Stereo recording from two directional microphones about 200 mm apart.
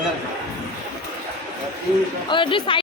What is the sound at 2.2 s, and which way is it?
Speech, 25° left (ahead or behind).